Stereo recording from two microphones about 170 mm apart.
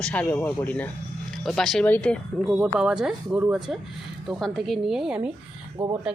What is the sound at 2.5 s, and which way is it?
Speech, 5° right (ahead or behind).